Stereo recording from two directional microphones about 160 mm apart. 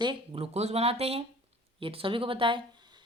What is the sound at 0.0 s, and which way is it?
Speech, 30° right (ahead or behind).